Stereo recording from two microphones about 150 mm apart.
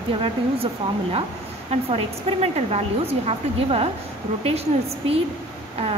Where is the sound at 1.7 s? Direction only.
40° right (ahead or behind).